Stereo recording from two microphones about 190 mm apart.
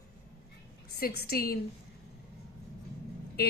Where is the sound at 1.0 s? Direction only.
55° left (ahead or behind).